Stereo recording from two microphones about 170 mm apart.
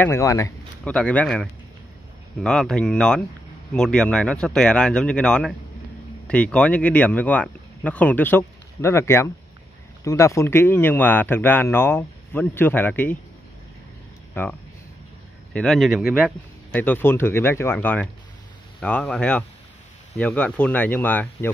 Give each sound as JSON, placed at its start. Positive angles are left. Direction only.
{"t": 0.0, "sound": "speech", "side_deg": 15}
{"t": 0.8, "sound": "speech", "side_deg": 10}
{"t": 14.3, "sound": "speech", "side_deg": 10}
{"t": 16.7, "sound": "speech", "side_deg": 10}